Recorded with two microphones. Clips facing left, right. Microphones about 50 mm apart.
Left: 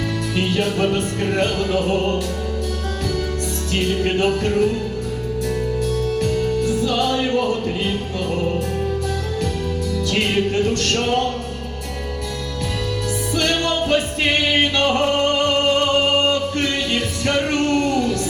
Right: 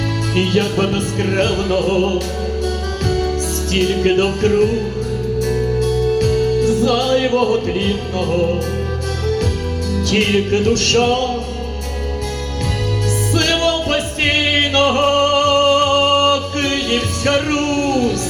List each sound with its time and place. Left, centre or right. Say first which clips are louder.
0.3 s music: right 4 dB; right
3.7 s music: right 5 dB; right
5.8 s music: right 6 dB; right
9.9 s music: right 5 dB; right
13.3 s music: right 4 dB; right